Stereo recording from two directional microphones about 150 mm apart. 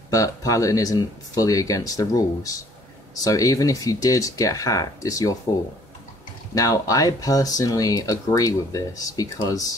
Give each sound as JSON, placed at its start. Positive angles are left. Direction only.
{"t": 0.1, "sound": "speech", "side_deg": 20}
{"t": 6.5, "sound": "speech", "side_deg": 25}